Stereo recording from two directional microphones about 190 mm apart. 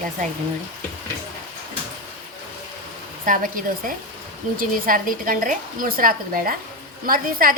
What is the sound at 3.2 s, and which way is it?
A woman's voice, 45° right (ahead or behind).